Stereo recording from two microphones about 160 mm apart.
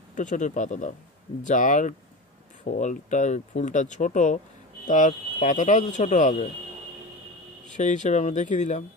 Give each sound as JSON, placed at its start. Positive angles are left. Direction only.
{"t": 0.1, "sound": "speech", "side_deg": 50}
{"t": 7.7, "sound": "speech", "side_deg": 50}